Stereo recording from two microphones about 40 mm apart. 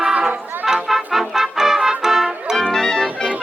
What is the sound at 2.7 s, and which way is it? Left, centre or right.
Organ, centre.